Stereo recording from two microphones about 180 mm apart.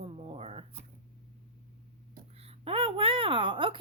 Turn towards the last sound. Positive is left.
turn(degrees=-30)  # may be behind; listen again after turning